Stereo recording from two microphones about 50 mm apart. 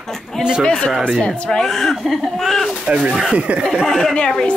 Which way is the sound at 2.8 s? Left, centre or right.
Right.